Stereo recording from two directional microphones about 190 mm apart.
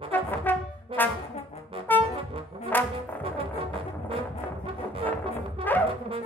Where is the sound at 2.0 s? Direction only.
30° right (ahead or behind).